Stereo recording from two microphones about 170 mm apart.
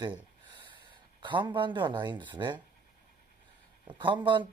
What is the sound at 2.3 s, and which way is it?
Speech, 25° right (ahead or behind).